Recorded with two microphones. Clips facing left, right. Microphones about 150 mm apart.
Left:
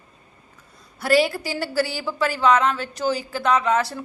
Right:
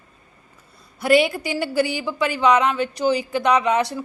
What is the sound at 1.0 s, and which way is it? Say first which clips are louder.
A woman's voice: right 2 dB; 15° right (ahead or behind).